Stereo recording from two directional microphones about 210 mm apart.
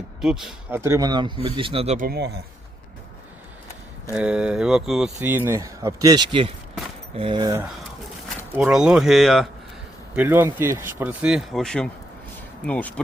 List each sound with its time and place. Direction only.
0.2 s speech: centre (ahead or behind); by 2.0 s 30° right (ahead or behind)
2.0 s speech: 50° right (ahead or behind)
4.1 s speech: 5° right (ahead or behind); by 7.5 s 25° right (ahead or behind)
8.5 s speech: 5° right (ahead or behind)